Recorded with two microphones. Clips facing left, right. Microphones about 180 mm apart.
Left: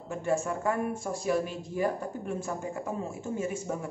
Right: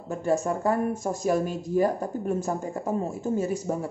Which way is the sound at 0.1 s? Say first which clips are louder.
Right 4 dB; 40° right (ahead or behind).